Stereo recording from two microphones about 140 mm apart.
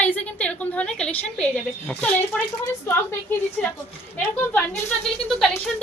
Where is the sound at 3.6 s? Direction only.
10° left (ahead or behind).